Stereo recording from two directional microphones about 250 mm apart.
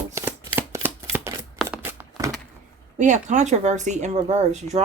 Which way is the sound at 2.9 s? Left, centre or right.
Right.